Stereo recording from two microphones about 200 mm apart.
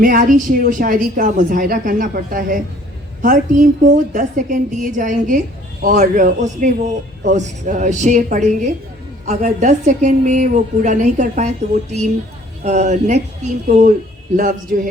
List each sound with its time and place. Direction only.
0.0 s a woman's voice: 40° right (ahead or behind)